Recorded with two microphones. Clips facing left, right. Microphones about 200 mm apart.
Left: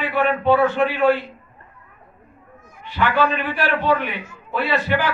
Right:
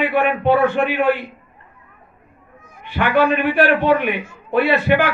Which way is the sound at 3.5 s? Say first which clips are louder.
Right 5 dB; 55° right (ahead or behind).